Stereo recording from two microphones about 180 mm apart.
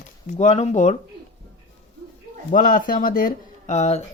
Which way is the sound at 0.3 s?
40° left (ahead or behind).